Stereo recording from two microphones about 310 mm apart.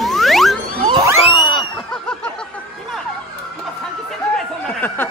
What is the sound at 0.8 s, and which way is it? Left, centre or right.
Speech, centre.